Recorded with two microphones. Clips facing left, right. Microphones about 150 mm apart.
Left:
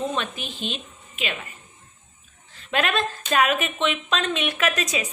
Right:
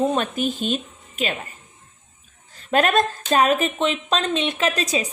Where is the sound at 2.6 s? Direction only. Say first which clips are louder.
Right 6 dB; 40° right (ahead or behind).